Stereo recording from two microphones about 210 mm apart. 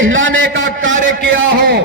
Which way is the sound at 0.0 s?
65° right (ahead or behind).